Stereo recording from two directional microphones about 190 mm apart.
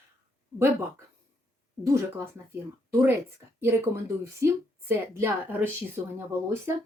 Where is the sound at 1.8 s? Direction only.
15° right (ahead or behind).